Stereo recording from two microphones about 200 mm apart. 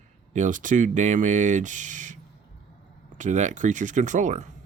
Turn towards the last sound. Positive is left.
turn(degrees=-35)  # may be behind; listen again after turning